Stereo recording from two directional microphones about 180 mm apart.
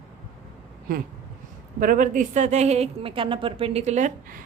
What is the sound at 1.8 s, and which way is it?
A woman's voice, 45° right (ahead or behind).